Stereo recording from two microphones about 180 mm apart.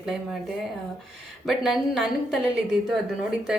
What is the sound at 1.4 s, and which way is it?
Speech, centre (ahead or behind).